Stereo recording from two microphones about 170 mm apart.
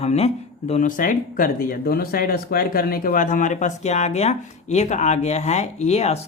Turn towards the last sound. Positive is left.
turn(degrees=40)  # may be behind; listen again after turning